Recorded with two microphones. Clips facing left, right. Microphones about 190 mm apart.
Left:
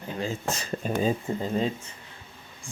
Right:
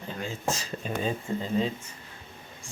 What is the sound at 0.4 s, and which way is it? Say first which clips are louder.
Speech: right 1 dB; 60° left (ahead or behind).